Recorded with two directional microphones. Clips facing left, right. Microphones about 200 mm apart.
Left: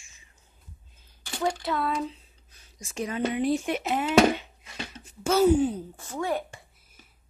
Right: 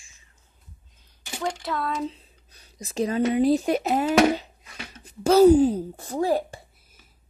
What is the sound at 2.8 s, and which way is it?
Speech, 35° right (ahead or behind).